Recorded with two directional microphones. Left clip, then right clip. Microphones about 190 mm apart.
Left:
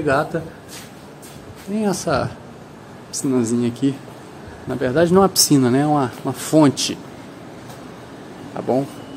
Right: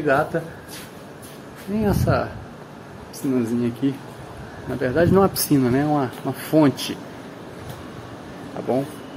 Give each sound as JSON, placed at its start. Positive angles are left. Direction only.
{"t": 0.0, "sound": "speech", "side_deg": 20}
{"t": 1.8, "sound": "speech", "side_deg": 15}
{"t": 3.3, "sound": "speech", "side_deg": 30}
{"t": 8.5, "sound": "speech", "side_deg": 30}